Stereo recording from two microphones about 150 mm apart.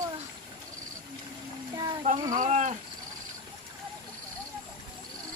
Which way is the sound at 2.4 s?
50° right (ahead or behind).